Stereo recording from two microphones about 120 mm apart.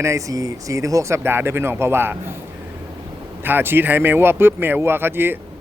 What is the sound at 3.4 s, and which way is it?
A man's voice, 15° right (ahead or behind).